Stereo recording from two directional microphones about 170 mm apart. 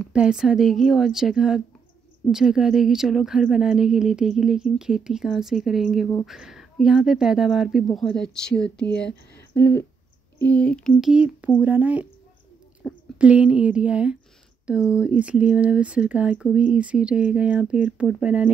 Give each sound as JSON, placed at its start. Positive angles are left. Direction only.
{"t": 0.1, "sound": "speech", "side_deg": -5}
{"t": 12.8, "sound": "a sound", "side_deg": 5}
{"t": 13.2, "sound": "speech", "side_deg": -5}